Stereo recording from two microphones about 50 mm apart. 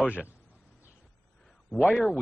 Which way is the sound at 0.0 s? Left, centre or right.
Left.